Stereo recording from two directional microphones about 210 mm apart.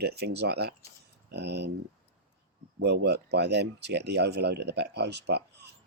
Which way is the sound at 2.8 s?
55° right (ahead or behind).